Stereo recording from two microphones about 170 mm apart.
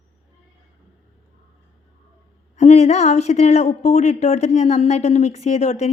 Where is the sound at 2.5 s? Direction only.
40° left (ahead or behind).